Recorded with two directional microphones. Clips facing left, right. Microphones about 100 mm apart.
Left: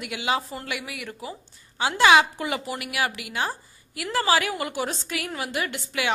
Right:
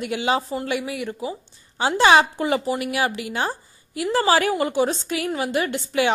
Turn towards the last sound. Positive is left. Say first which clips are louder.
# right 7 dB
turn(degrees=-30)  # may be behind; listen again after turning